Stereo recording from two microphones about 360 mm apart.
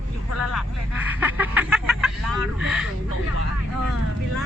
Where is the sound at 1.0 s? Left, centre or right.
Centre.